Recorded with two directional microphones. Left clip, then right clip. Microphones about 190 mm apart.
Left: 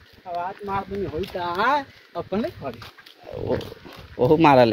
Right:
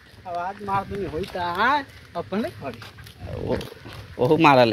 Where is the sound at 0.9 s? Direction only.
60° left (ahead or behind).